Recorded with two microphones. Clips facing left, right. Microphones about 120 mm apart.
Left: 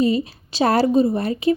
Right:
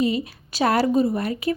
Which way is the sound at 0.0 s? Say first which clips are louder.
Left 4 dB; 30° left (ahead or behind).